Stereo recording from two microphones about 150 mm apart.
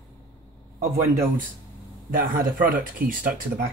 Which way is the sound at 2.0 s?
70° right (ahead or behind).